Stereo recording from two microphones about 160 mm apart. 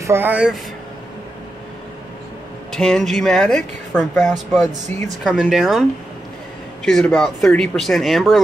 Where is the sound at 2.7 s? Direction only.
5° left (ahead or behind).